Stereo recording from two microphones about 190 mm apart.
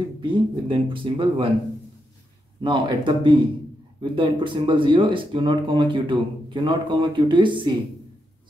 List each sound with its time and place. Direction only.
0.2 s speech: 25° right (ahead or behind)
2.6 s speech: 25° right (ahead or behind)